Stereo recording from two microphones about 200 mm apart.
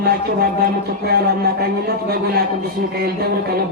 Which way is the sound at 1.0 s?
50° right (ahead or behind).